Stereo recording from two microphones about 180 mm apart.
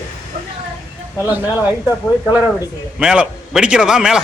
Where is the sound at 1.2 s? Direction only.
10° right (ahead or behind).